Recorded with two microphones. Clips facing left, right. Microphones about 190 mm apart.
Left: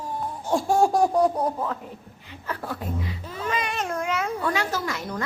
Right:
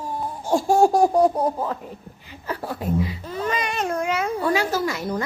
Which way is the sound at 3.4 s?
Centre (ahead or behind).